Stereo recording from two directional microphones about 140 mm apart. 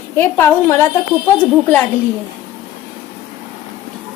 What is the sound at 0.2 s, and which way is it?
Speech, 15° left (ahead or behind).